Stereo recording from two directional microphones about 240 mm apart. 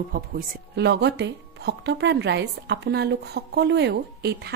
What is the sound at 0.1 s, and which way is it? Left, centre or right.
Speech, right.